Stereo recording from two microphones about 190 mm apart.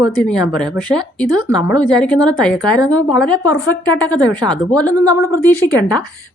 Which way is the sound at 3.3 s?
20° right (ahead or behind).